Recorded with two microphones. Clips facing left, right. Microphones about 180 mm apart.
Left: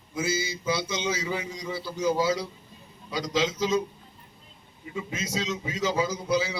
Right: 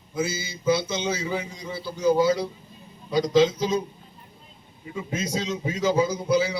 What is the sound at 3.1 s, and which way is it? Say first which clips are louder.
Speech: right 8 dB; 50° right (ahead or behind).